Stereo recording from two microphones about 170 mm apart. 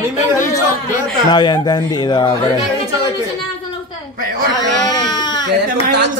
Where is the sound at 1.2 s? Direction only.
25° left (ahead or behind).